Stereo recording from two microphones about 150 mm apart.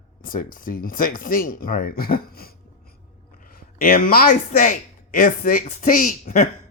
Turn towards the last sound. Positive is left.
turn(degrees=60)  # may be behind; listen again after turning